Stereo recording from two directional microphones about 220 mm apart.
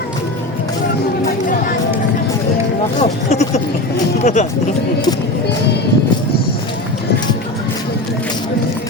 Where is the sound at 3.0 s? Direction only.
30° left (ahead or behind).